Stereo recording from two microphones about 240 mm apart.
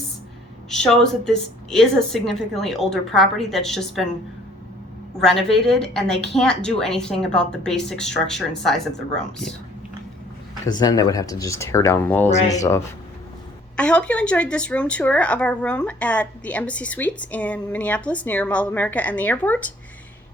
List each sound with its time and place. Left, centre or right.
0.7 s speech: centre
5.2 s speech: centre
10.7 s speech: centre
12.3 s speech: left
12.5 s speech: centre